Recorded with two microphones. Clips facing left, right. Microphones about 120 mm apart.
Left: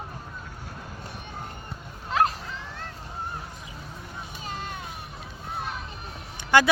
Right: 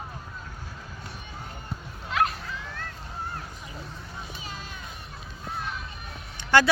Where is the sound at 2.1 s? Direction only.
35° left (ahead or behind).